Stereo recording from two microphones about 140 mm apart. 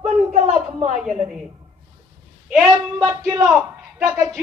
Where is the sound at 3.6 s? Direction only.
5° right (ahead or behind).